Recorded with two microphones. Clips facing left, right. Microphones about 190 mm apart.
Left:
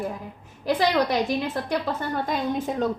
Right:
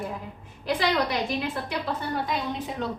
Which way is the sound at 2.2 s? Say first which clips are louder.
Left 4 dB; 45° left (ahead or behind).